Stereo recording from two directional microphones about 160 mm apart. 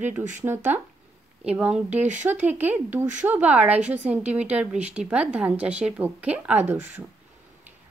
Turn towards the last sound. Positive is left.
turn(degrees=-10)  # may be behind; listen again after turning